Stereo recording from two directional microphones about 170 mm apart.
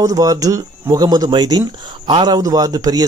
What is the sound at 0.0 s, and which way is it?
Speech, 20° right (ahead or behind).